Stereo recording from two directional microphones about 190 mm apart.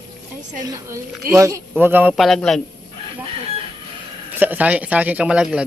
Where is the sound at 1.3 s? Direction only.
15° right (ahead or behind); by 2.6 s centre (ahead or behind).